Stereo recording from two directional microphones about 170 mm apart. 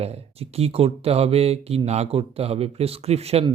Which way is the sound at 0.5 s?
35° right (ahead or behind).